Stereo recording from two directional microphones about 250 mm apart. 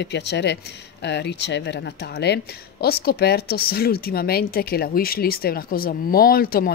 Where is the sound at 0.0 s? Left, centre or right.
Left.